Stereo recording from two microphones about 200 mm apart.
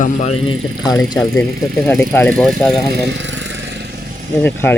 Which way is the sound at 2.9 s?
60° right (ahead or behind).